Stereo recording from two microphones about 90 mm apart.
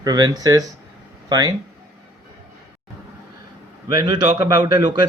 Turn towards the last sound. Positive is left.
turn(degrees=-55)  # may be behind; listen again after turning